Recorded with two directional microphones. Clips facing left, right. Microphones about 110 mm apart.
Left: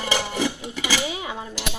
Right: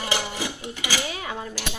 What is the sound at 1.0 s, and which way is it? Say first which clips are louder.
Speech: left 2 dB; 15° left (ahead or behind).